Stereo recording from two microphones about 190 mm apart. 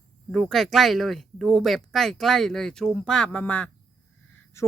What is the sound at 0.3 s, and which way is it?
Speech, centre (ahead or behind).